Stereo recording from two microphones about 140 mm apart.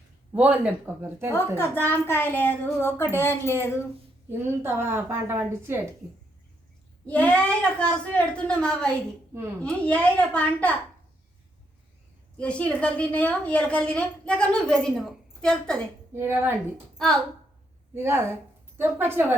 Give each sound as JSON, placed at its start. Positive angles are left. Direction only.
{"t": 0.3, "sound": "a woman's voice", "side_deg": -10}
{"t": 1.5, "sound": "a woman's voice", "side_deg": 15}
{"t": 4.3, "sound": "a woman's voice", "side_deg": -15}
{"t": 7.1, "sound": "a woman's voice", "side_deg": 10}
{"t": 12.4, "sound": "a woman's voice", "side_deg": 10}
{"t": 16.1, "sound": "a woman's voice", "side_deg": -15}
{"t": 17.9, "sound": "a woman's voice", "side_deg": -15}